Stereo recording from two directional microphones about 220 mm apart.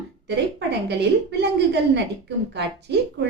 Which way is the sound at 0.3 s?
50° right (ahead or behind).